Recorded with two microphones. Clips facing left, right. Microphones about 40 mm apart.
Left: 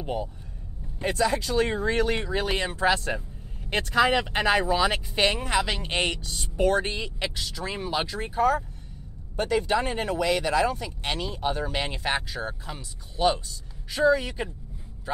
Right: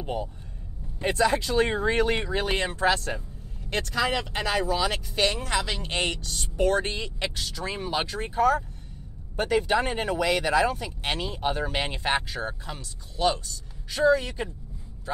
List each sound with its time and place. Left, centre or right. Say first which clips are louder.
0.0 s speech: left 1 dB; centre
1.0 s speech: right 1 dB; centre
9.4 s speech: right 1 dB; centre
12.7 s speech: left 1 dB; centre
13.8 s a woman's voice: even; centre